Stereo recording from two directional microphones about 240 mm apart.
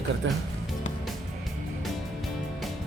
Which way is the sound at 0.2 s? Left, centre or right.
Right.